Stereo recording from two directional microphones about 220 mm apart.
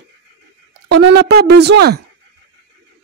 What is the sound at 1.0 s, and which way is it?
Speech, 50° right (ahead or behind).